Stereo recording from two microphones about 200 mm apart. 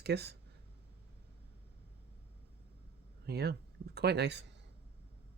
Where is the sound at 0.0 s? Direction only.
55° right (ahead or behind).